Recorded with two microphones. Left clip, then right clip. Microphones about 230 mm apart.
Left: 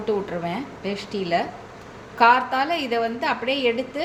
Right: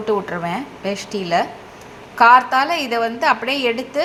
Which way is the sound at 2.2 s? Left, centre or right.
Centre.